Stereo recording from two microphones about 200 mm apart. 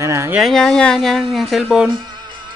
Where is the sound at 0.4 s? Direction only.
Centre (ahead or behind).